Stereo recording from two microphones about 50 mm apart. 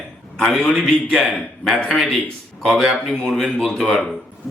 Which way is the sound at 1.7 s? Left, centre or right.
Left.